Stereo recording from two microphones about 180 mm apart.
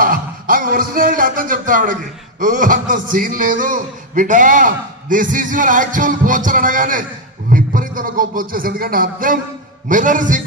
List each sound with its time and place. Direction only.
0.0 s a man's voice: 50° right (ahead or behind)